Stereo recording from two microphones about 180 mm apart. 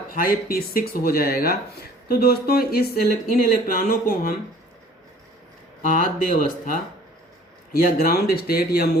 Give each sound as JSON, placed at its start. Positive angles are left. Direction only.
{"t": 0.1, "sound": "speech", "side_deg": 55}
{"t": 5.9, "sound": "speech", "side_deg": 50}
{"t": 7.7, "sound": "speech", "side_deg": 55}